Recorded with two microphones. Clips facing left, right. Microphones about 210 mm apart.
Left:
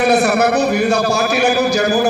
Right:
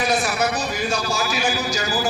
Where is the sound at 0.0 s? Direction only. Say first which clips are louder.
Left 9 dB; 65° left (ahead or behind).